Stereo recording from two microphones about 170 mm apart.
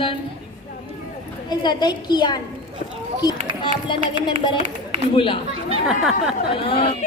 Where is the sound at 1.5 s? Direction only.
25° left (ahead or behind).